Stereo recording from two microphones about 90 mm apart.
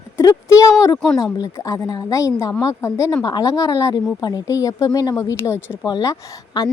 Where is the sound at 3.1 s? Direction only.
50° left (ahead or behind).